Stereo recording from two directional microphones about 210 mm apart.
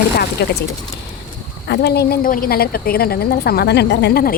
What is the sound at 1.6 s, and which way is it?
A woman's voice, 50° left (ahead or behind).